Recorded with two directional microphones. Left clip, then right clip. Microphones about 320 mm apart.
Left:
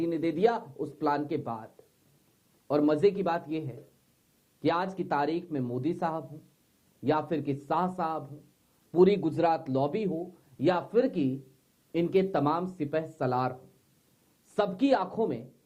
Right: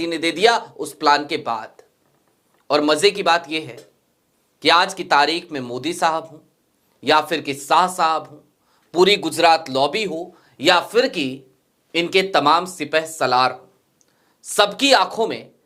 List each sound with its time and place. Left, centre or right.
0.0 s speech: centre
0.7 s speech: right
0.9 s speech: centre
10.1 s speech: right
10.6 s speech: centre